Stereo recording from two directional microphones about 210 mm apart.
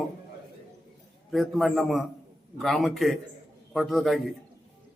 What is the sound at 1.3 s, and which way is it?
A man's voice, centre (ahead or behind).